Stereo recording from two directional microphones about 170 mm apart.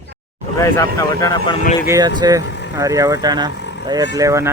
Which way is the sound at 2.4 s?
90° left.